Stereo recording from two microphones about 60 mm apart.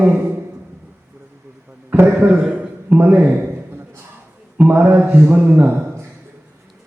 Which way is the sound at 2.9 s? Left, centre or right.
Right.